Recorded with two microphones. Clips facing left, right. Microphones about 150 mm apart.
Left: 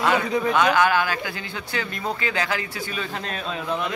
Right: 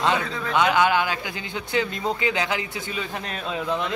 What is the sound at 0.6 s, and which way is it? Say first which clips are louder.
Speech: right 1 dB; 20° right (ahead or behind).